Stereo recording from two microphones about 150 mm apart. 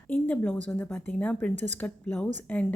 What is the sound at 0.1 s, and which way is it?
Speech, 10° left (ahead or behind).